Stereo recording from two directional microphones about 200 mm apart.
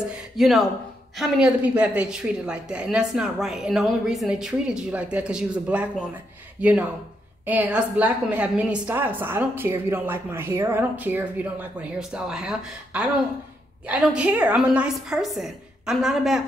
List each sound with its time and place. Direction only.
0.1 s a woman's voice: centre (ahead or behind)